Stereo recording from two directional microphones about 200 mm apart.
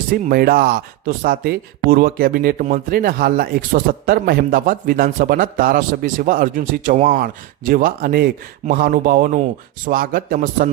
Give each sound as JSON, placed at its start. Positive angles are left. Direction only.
{"t": 0.1, "sound": "speech", "side_deg": -45}